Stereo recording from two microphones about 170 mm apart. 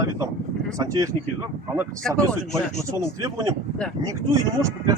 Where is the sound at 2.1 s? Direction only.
Centre (ahead or behind).